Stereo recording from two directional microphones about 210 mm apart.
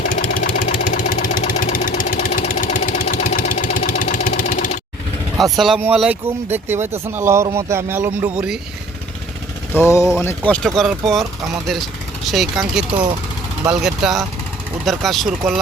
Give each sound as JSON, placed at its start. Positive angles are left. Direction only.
{"t": 0.0, "sound": "vehicle", "side_deg": 40}
{"t": 5.4, "sound": "speech", "side_deg": 0}
{"t": 9.7, "sound": "speech", "side_deg": 10}
{"t": 12.3, "sound": "speech", "side_deg": 0}
{"t": 12.9, "sound": "speech", "side_deg": -25}
{"t": 13.7, "sound": "speech", "side_deg": 0}